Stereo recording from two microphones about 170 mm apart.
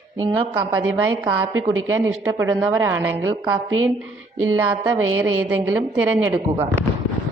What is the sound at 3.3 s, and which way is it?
Speech, 25° right (ahead or behind).